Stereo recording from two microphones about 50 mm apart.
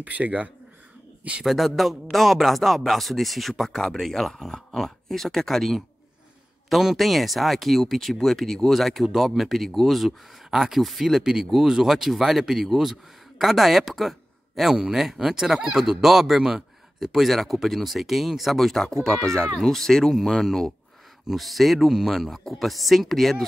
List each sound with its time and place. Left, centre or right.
0.0 s speech: right
1.4 s speech: centre
19.2 s speech: centre